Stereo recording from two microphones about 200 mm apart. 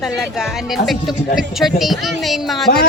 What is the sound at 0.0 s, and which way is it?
Speech, centre (ahead or behind).